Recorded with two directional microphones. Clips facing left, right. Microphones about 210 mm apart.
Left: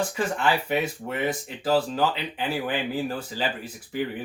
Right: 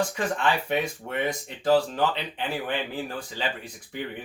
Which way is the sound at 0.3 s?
5° left (ahead or behind).